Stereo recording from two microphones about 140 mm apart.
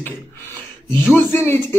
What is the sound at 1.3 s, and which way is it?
Speech, 15° left (ahead or behind).